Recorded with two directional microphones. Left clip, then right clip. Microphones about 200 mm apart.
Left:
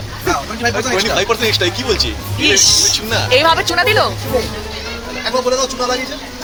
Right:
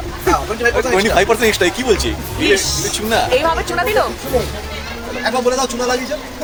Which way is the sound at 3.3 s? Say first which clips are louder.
Left 4 dB; 20° left (ahead or behind).